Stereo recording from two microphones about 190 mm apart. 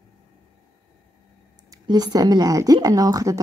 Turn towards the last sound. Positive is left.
turn(degrees=-20)  # may be behind; listen again after turning